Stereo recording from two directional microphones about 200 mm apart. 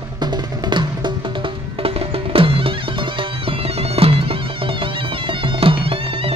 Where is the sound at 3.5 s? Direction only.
30° right (ahead or behind).